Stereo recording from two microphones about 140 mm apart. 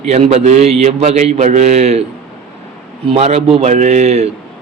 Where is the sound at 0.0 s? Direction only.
50° right (ahead or behind).